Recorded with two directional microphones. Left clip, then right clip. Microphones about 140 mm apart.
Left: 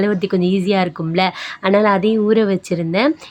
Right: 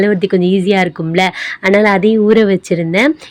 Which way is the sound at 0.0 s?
15° right (ahead or behind).